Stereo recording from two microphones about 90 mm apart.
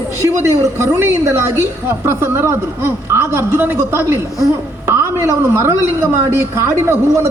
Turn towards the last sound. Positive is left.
turn(degrees=-30)  # may be behind; listen again after turning